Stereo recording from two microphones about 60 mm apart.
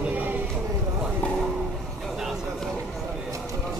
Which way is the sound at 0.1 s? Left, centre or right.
Right.